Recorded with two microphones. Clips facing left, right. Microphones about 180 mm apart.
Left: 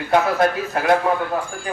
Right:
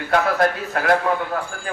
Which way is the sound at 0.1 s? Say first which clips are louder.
Left 1 dB; 20° left (ahead or behind).